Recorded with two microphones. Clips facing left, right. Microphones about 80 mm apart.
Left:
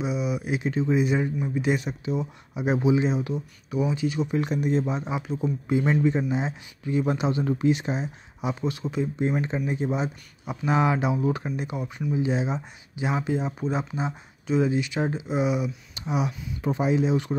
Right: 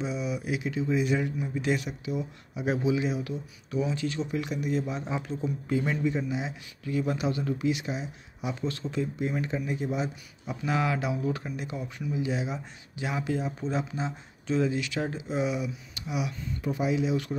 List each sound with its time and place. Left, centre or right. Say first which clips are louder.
0.0 s a sound: left 4 dB; centre
0.5 s speech: left 4 dB; left; by 4.3 s centre
4.3 s speech: left 5 dB; left; by 5.9 s centre
5.9 s speech: left 5 dB; left
8.4 s speech: left 4 dB; left
9.0 s speech: left 6 dB; left
15.9 s speech: left 5 dB; left